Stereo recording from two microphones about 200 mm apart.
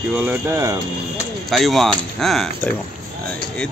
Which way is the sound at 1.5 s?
Centre (ahead or behind).